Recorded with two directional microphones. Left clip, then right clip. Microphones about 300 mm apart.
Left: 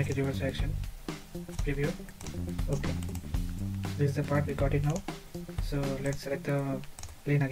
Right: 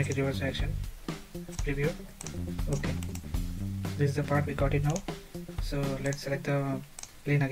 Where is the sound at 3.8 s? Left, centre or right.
Centre.